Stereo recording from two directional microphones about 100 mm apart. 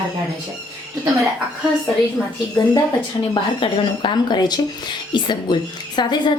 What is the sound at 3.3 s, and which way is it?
A woman's voice, 55° left (ahead or behind).